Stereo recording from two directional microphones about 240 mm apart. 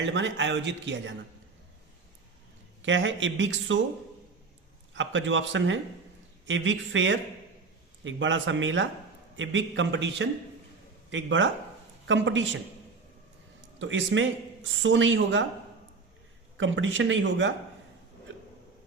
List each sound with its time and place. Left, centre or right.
0.0 s speech: right
2.8 s speech: right
4.9 s speech: right
13.7 s speech: right
16.6 s speech: right